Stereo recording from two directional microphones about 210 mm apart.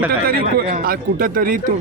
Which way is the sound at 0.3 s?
45° right (ahead or behind).